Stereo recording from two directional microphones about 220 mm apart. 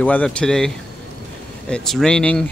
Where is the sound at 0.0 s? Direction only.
5° left (ahead or behind).